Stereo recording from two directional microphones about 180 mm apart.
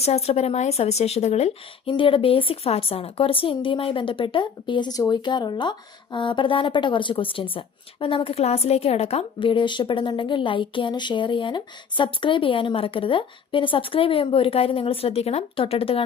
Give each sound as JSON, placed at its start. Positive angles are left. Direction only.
{"t": 0.0, "sound": "a woman's voice", "side_deg": 35}